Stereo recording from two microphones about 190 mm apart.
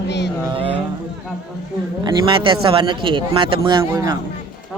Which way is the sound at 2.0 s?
25° right (ahead or behind).